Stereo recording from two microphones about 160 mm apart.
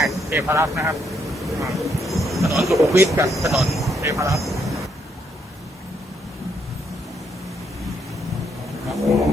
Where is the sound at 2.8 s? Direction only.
20° right (ahead or behind).